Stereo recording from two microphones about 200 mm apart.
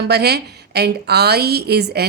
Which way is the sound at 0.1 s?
55° right (ahead or behind).